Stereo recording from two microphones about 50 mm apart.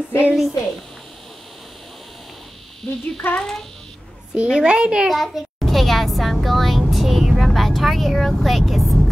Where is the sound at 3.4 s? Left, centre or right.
Centre.